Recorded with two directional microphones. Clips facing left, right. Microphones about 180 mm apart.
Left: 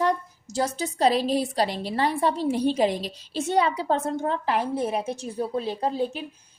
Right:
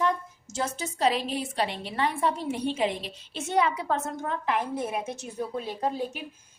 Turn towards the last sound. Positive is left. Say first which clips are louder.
# left 4 dB
turn(degrees=35)  # may be behind; listen again after turning